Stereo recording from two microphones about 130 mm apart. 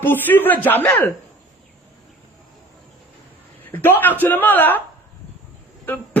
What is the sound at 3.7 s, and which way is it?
A man's voice, 15° left (ahead or behind).